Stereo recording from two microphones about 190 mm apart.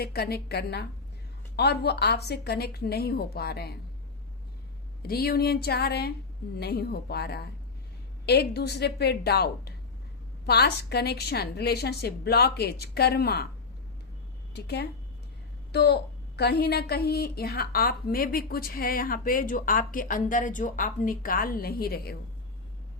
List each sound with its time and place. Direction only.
0.0 s a woman's voice: 55° left (ahead or behind)
5.0 s a woman's voice: 55° left (ahead or behind)
14.5 s a woman's voice: 60° left (ahead or behind)